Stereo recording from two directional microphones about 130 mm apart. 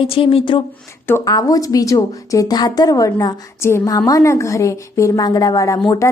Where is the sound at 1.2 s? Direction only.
30° left (ahead or behind).